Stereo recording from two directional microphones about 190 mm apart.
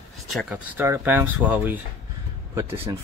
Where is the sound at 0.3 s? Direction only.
5° right (ahead or behind).